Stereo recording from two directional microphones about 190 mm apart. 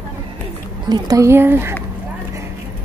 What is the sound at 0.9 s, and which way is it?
Speech, 20° right (ahead or behind).